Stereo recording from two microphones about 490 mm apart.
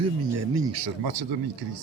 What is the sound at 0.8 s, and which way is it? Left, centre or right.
Speech, right.